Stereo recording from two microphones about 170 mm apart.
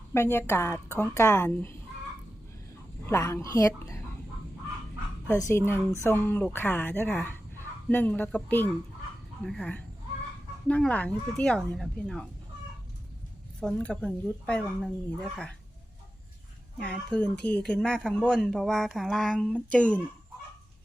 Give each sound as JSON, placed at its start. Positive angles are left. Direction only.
{"t": 0.1, "sound": "speech", "side_deg": 15}
{"t": 3.1, "sound": "speech", "side_deg": 15}
{"t": 5.4, "sound": "speech", "side_deg": 15}
{"t": 13.6, "sound": "speech", "side_deg": 5}
{"t": 16.8, "sound": "speech", "side_deg": 5}